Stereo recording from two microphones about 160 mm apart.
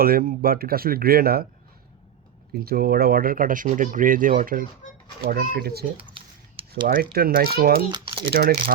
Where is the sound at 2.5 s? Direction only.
70° right (ahead or behind).